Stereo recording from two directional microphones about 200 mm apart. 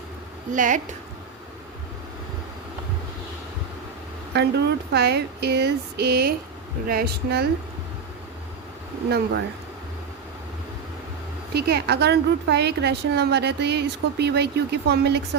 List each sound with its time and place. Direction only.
0.5 s a woman's voice: 40° right (ahead or behind)
4.4 s a woman's voice: 55° right (ahead or behind)
9.0 s a woman's voice: 55° right (ahead or behind)
11.5 s a woman's voice: 55° right (ahead or behind)